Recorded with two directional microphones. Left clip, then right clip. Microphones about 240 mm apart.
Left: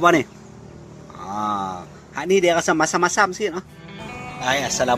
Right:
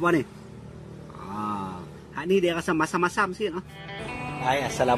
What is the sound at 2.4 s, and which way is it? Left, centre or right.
Speech, centre.